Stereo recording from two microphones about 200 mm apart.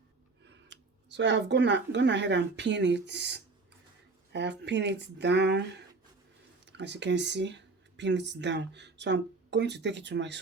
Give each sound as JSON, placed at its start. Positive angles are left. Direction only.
{"t": 0.4, "sound": "speech", "side_deg": -60}
{"t": 6.7, "sound": "speech", "side_deg": -60}